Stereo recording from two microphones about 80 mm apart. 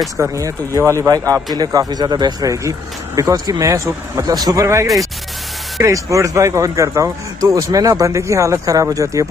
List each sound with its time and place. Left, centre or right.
0.2 s speech: right
3.2 s speech: right
5.8 s speech: right